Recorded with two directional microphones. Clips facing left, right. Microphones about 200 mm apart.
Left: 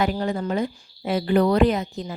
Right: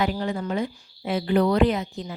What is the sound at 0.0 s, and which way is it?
A woman's voice, 40° left (ahead or behind).